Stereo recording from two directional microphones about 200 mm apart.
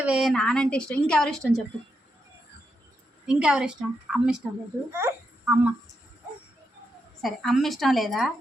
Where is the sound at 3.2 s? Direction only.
5° right (ahead or behind).